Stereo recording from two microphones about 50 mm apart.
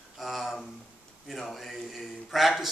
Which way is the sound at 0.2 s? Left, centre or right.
Centre.